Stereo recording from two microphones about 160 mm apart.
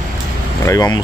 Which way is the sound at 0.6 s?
25° left (ahead or behind).